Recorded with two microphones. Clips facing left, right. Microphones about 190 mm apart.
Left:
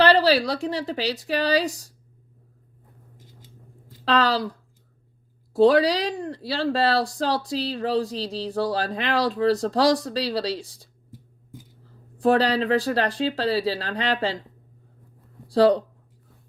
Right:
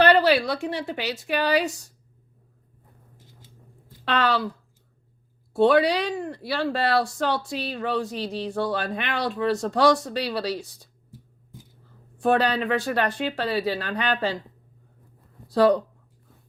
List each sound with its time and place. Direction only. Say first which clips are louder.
0.0 s speech: even; 30° left (ahead or behind)
4.0 s speech: left 2 dB; 35° left (ahead or behind)
5.5 s speech: left 2 dB; 35° left (ahead or behind)
12.1 s speech: left 2 dB; 35° left (ahead or behind)
15.4 s speech: left 1 dB; 30° left (ahead or behind)